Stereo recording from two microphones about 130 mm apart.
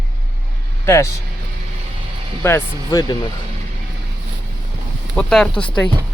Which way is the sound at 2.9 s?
30° left (ahead or behind).